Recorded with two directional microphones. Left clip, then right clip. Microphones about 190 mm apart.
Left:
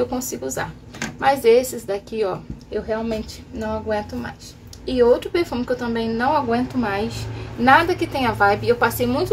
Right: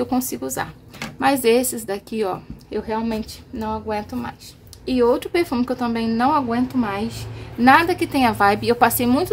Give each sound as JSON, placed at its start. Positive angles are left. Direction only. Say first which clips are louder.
{"t": 0.0, "sound": "a woman's voice", "louder": "even", "side_deg": -45}